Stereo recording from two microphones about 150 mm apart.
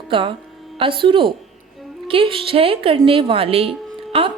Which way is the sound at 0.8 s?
35° right (ahead or behind).